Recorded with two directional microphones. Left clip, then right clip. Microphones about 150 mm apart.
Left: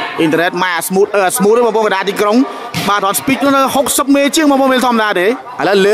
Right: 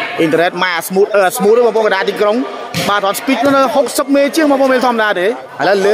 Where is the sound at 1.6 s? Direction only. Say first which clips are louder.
Right 1 dB; 30° left (ahead or behind).